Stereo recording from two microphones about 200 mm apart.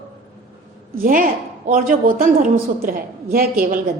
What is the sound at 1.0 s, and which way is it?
A woman's voice, 45° right (ahead or behind).